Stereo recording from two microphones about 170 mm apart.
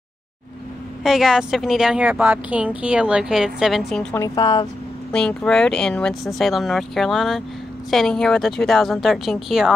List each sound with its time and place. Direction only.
1.0 s a woman's voice: centre (ahead or behind)
4.1 s speech: 20° left (ahead or behind)
5.1 s a woman's voice: 5° left (ahead or behind)